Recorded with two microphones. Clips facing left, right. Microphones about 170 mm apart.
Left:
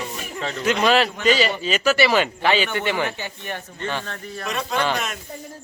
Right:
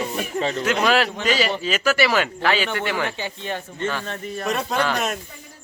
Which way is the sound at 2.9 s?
20° left (ahead or behind).